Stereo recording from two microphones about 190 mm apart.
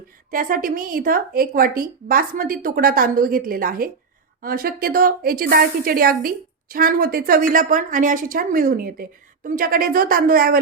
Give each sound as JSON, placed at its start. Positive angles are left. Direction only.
{"t": 0.3, "sound": "a woman's voice", "side_deg": -45}